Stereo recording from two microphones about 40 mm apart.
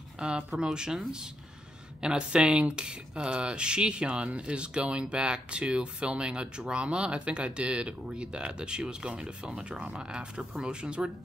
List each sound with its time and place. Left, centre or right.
0.2 s speech: right